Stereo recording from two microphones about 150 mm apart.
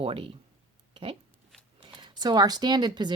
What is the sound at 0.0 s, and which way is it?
Speech, 40° right (ahead or behind).